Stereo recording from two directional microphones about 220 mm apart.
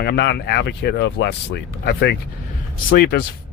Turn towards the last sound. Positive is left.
turn(degrees=45)  # may be behind; listen again after turning